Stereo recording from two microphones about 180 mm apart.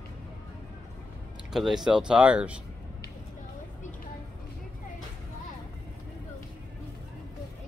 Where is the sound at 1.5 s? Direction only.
Centre (ahead or behind).